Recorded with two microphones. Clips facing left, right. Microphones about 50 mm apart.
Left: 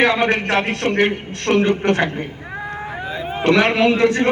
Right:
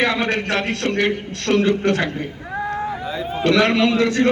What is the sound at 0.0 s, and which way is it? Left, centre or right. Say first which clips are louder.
A man's voice: left 3 dB; left.